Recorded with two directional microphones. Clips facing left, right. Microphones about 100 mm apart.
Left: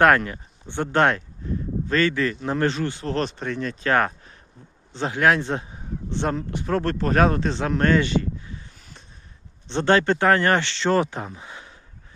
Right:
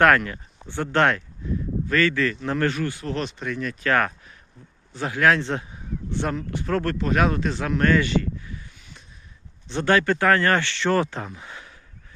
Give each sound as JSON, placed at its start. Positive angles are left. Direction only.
{"t": 0.0, "sound": "a man's voice", "side_deg": 20}
{"t": 7.0, "sound": "a man's voice", "side_deg": 40}
{"t": 8.8, "sound": "a sound", "side_deg": 40}
{"t": 9.6, "sound": "a man's voice", "side_deg": 25}